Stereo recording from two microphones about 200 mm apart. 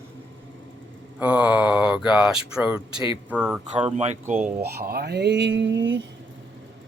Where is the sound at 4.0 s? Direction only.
35° right (ahead or behind).